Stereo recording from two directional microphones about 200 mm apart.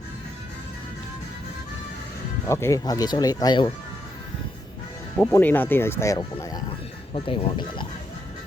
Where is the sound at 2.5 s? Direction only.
15° left (ahead or behind).